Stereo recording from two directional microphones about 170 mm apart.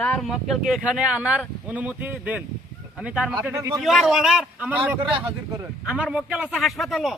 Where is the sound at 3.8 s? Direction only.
Centre (ahead or behind).